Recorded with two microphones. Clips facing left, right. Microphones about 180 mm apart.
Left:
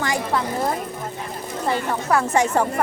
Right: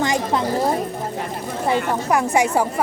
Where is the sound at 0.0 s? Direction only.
20° right (ahead or behind).